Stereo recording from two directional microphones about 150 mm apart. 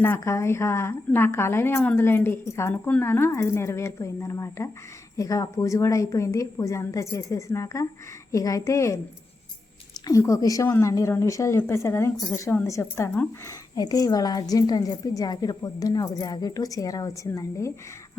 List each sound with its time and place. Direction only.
0.0 s a woman's voice: 15° left (ahead or behind)